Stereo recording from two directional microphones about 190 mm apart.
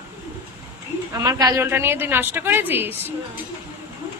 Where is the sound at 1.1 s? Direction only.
20° right (ahead or behind).